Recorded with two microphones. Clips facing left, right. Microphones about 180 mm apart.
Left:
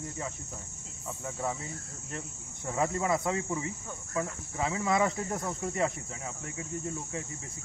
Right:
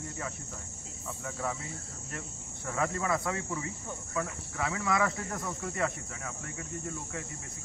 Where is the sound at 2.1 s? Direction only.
25° left (ahead or behind).